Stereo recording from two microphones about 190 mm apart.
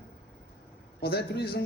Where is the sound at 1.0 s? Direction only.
55° left (ahead or behind).